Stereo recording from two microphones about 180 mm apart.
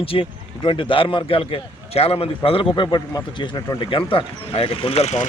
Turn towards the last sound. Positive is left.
turn(degrees=40)  # may be behind; listen again after turning